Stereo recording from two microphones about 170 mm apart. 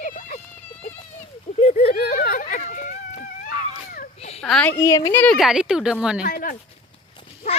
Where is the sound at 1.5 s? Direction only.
40° left (ahead or behind).